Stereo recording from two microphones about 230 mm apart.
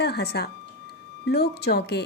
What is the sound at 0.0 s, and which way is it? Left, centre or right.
Speech, left.